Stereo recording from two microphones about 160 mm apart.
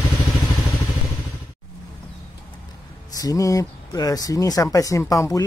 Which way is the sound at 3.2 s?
20° left (ahead or behind).